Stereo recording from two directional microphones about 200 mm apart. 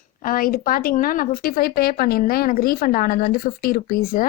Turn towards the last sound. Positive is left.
turn(degrees=45)  # may be behind; listen again after turning